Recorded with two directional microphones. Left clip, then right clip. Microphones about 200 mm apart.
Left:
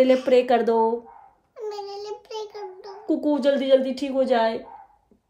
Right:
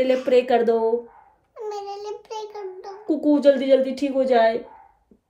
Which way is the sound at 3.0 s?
10° left (ahead or behind).